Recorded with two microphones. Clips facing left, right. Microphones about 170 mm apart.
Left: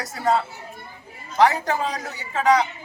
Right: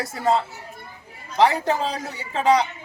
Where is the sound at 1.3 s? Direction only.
30° right (ahead or behind).